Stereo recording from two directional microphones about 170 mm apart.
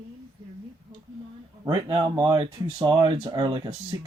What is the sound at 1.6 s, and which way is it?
Speech, 30° right (ahead or behind).